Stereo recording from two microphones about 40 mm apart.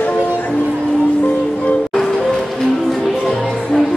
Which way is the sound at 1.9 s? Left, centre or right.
Centre.